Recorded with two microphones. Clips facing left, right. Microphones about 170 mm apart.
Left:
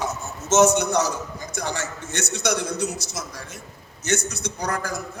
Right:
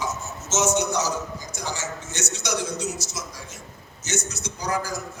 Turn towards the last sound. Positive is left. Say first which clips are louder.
# even
turn(degrees=60)  # may be behind; listen again after turning